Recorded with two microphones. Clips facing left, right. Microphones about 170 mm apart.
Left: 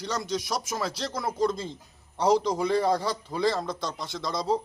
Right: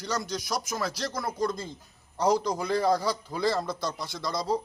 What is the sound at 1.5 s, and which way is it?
Speech, 25° left (ahead or behind).